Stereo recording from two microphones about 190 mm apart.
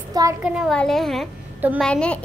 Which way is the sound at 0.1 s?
20° right (ahead or behind).